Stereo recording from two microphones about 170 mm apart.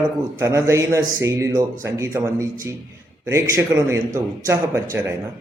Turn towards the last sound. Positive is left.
turn(degrees=-15)  # may be behind; listen again after turning